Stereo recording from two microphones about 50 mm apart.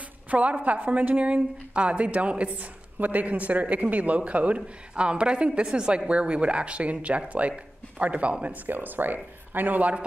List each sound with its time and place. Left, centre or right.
0.3 s a woman's voice: right
8.6 s speech: right